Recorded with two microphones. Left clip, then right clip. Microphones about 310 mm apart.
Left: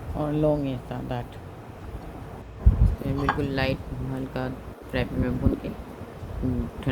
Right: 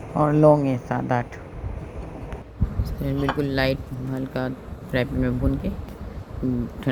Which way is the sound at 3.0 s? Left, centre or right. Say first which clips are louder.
Right 2 dB; centre.